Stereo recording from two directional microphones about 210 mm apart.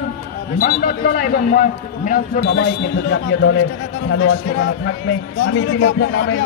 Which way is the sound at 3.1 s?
60° left (ahead or behind).